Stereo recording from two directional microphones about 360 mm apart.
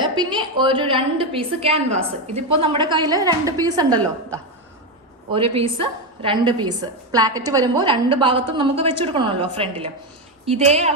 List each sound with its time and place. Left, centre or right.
0.0 s a woman's voice: centre
5.3 s a woman's voice: centre